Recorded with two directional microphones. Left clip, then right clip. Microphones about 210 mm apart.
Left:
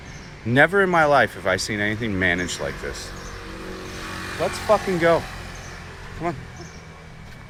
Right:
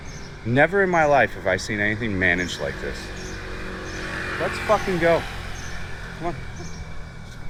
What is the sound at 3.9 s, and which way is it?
Speech, 55° left (ahead or behind).